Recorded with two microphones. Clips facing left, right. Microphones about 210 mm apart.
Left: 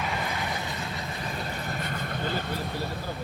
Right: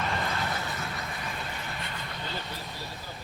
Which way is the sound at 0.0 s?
10° left (ahead or behind).